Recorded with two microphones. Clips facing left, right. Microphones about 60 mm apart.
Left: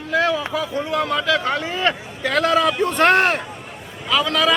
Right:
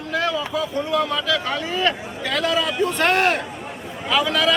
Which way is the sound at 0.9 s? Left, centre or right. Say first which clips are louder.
Left 2 dB; left.